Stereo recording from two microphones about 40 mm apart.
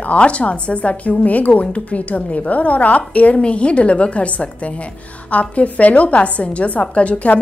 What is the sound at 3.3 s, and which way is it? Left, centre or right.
A woman's voice, left.